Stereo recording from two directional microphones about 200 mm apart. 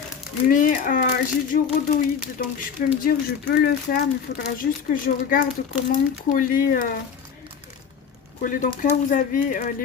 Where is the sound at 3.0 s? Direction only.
50° left (ahead or behind).